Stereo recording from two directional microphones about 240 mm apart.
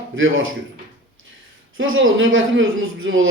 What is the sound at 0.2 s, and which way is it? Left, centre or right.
Speech, right.